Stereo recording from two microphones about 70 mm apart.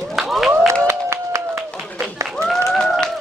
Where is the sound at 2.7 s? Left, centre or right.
Centre.